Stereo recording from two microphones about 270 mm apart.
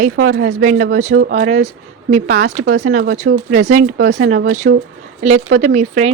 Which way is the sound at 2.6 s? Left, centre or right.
Right.